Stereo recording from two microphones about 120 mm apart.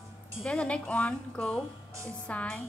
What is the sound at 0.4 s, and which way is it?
Speech, 10° left (ahead or behind).